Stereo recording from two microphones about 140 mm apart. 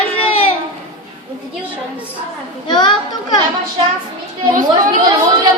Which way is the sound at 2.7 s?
35° left (ahead or behind).